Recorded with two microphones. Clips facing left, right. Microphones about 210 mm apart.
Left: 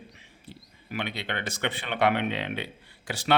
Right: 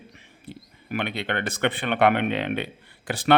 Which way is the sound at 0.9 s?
55° right (ahead or behind).